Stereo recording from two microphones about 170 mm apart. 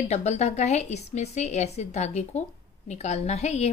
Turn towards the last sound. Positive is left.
turn(degrees=40)  # may be behind; listen again after turning